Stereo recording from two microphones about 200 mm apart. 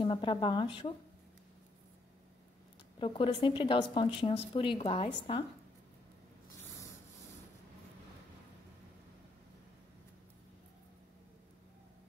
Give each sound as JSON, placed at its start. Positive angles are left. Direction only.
{"t": 0.0, "sound": "a woman's voice", "side_deg": 25}
{"t": 3.0, "sound": "a woman's voice", "side_deg": 25}